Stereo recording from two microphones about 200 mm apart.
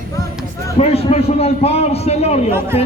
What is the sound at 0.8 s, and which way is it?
A man's voice, 30° left (ahead or behind).